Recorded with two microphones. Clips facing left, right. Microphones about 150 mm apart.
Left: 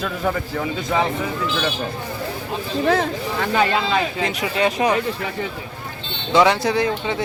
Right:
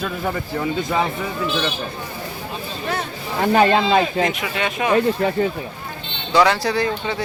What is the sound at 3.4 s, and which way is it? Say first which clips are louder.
Speech: right 5 dB; 40° right (ahead or behind).